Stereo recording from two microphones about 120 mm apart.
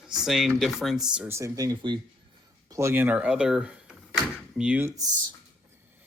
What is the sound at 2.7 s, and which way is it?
Speech, 20° right (ahead or behind).